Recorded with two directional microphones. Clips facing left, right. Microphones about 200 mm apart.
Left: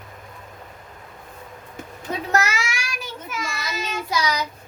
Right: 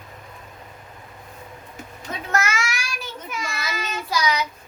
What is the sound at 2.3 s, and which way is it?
Child singing, 35° left (ahead or behind).